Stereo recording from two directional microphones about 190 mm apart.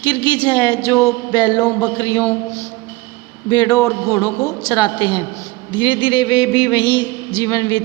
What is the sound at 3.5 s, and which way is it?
A woman's voice, 20° left (ahead or behind).